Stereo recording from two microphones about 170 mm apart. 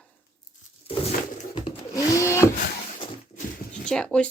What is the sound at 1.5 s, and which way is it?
Blender, 20° left (ahead or behind).